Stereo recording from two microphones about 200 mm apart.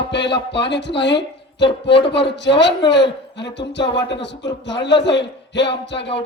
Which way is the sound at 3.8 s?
25° left (ahead or behind).